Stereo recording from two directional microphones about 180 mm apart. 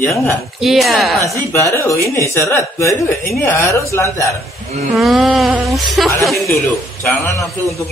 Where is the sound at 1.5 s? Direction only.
15° left (ahead or behind).